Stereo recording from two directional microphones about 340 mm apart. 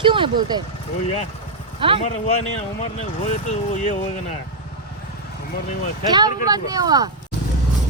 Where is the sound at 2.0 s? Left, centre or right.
Centre.